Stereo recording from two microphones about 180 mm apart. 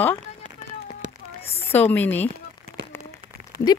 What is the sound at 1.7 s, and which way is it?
Speech, 10° left (ahead or behind).